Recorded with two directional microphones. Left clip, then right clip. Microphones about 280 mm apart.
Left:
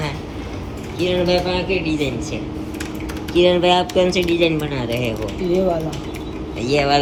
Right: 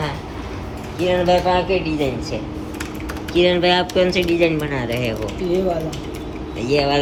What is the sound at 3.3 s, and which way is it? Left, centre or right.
Speech, centre.